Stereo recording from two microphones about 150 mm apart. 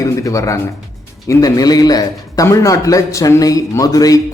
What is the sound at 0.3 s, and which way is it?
A man's voice, 20° left (ahead or behind).